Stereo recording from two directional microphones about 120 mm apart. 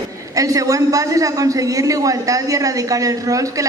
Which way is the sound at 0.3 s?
30° right (ahead or behind).